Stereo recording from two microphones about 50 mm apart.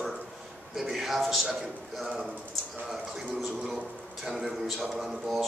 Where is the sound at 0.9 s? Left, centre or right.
Centre.